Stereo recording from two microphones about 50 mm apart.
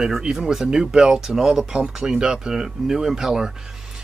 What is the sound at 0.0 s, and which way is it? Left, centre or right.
Speech, centre.